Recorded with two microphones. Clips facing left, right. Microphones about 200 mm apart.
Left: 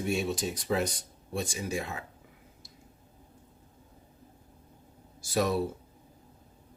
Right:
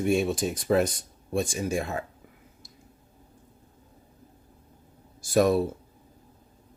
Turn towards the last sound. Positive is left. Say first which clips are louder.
# right 7 dB
turn(degrees=-50)  # may be behind; listen again after turning